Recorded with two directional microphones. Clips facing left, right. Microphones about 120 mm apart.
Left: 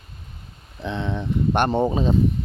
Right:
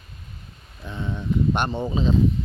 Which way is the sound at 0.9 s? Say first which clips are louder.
Left 2 dB; 70° left (ahead or behind).